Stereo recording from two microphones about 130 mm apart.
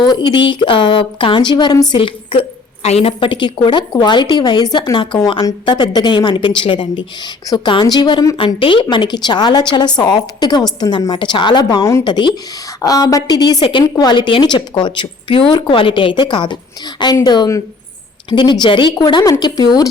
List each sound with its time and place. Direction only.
0.0 s a woman's voice: 35° left (ahead or behind)
2.0 s a woman's voice: 45° left (ahead or behind)